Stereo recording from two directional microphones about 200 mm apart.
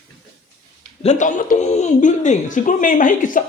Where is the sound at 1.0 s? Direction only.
35° left (ahead or behind).